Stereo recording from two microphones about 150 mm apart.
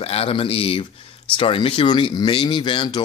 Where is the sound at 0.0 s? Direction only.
40° left (ahead or behind).